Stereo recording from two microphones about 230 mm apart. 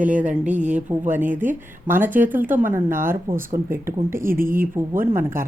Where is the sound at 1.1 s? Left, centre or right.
Centre.